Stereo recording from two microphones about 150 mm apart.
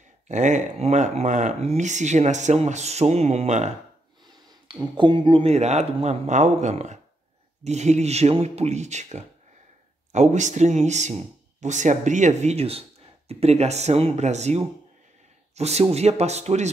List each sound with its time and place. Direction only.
0.3 s speech: 55° right (ahead or behind)
4.3 s a sound: 30° right (ahead or behind)
4.9 s speech: 30° right (ahead or behind); by 16.6 s 45° right (ahead or behind)